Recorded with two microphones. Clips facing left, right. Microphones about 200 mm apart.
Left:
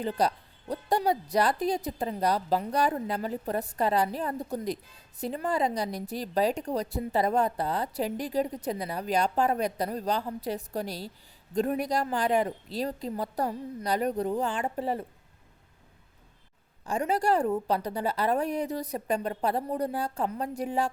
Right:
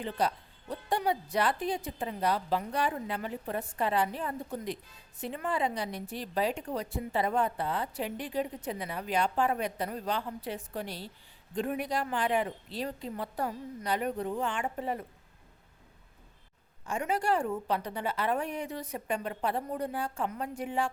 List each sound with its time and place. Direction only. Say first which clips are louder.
0.0 s a woman's voice: left 4 dB; 40° left (ahead or behind)
16.8 s a woman's voice: left 4 dB; 35° left (ahead or behind)